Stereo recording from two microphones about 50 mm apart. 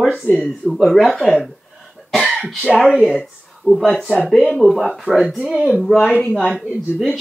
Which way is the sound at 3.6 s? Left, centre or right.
Right.